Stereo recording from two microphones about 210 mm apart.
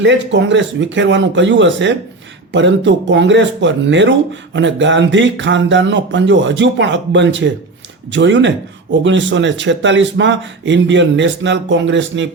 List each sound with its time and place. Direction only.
0.0 s speech: 60° right (ahead or behind)